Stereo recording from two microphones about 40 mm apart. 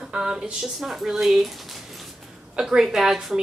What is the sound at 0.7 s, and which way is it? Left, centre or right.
Speech, centre.